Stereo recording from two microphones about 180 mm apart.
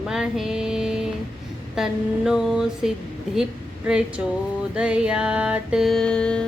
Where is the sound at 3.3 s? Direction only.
5° right (ahead or behind).